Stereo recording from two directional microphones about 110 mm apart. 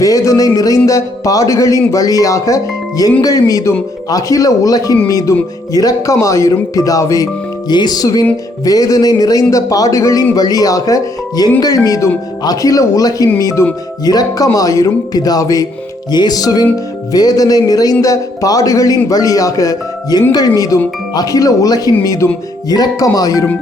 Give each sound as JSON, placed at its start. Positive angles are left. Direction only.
{"t": 0.0, "sound": "music", "side_deg": 30}
{"t": 0.9, "sound": "a man's voice", "side_deg": 30}